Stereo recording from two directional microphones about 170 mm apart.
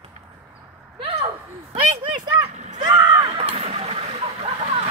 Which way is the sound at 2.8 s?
25° right (ahead or behind).